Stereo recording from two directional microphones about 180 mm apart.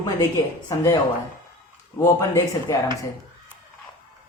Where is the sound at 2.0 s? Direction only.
20° left (ahead or behind).